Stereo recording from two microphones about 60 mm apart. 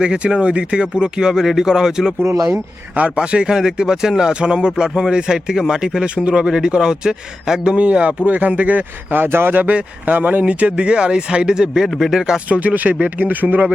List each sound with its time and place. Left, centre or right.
0.0 s speech: centre
3.2 s speech: centre
12.5 s speech: right